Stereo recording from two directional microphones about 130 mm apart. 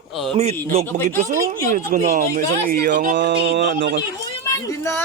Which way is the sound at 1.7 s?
90° right.